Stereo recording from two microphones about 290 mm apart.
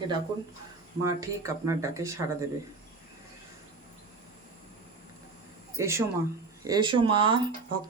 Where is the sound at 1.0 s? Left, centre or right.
Centre.